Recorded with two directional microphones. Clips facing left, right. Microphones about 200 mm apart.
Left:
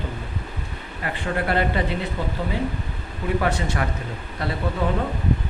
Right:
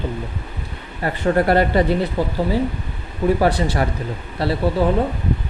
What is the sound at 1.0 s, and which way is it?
Speech, 40° right (ahead or behind).